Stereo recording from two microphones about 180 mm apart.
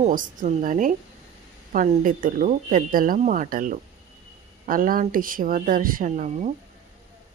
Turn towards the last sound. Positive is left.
turn(degrees=-40)  # may be behind; listen again after turning